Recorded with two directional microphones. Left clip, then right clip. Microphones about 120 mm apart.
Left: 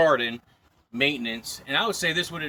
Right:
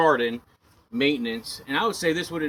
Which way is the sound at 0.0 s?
40° left (ahead or behind).